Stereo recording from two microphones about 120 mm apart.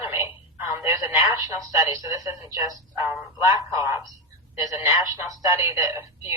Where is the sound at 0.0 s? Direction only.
25° right (ahead or behind).